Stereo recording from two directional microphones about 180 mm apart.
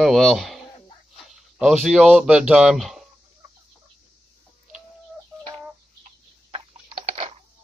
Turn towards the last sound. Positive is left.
turn(degrees=-30)  # may be behind; listen again after turning